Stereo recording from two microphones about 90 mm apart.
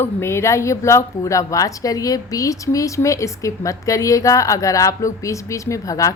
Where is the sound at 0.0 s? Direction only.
30° left (ahead or behind).